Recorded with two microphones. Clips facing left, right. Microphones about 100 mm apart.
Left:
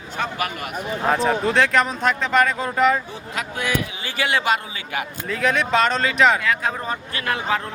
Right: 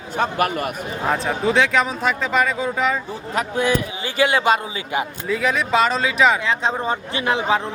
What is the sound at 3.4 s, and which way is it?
A man's voice, 30° right (ahead or behind).